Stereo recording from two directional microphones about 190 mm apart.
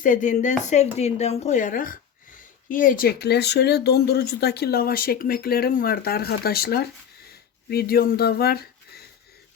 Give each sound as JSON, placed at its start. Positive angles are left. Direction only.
{"t": 0.0, "sound": "speech", "side_deg": 45}